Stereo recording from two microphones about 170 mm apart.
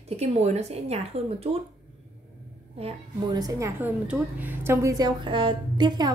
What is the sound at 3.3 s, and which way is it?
A woman's voice, 20° right (ahead or behind).